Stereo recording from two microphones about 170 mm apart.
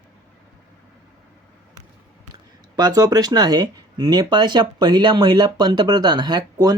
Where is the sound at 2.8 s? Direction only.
20° right (ahead or behind).